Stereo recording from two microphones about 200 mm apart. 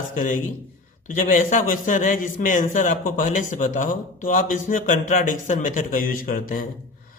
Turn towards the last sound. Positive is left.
turn(degrees=45)  # may be behind; listen again after turning